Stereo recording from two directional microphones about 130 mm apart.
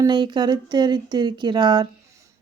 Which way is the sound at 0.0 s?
35° right (ahead or behind).